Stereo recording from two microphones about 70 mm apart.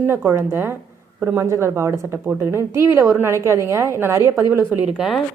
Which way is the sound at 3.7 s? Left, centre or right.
Right.